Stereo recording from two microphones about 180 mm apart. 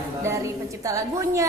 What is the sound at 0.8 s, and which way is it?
Speech, 15° right (ahead or behind).